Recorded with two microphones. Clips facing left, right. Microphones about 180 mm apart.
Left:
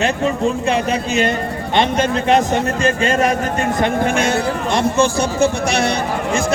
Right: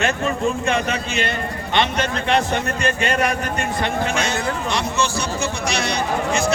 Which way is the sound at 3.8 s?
50° left (ahead or behind).